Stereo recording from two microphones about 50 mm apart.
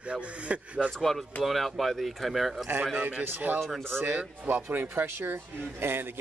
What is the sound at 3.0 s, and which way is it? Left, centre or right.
A man's voice, right.